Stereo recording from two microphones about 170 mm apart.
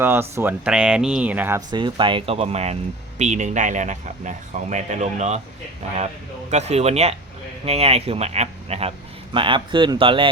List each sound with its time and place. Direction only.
0.0 s speech: 15° right (ahead or behind)
1.7 s speech: 30° right (ahead or behind)
6.5 s speech: 40° right (ahead or behind)